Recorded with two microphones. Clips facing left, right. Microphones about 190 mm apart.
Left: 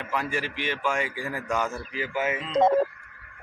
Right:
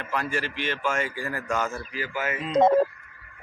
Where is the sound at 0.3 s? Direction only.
15° left (ahead or behind).